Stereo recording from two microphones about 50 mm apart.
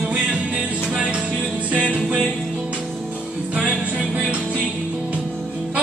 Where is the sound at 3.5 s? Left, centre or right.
Right.